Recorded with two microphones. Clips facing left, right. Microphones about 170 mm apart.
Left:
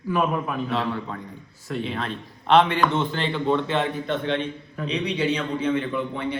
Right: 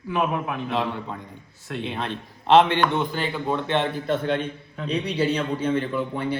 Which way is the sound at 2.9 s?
10° right (ahead or behind).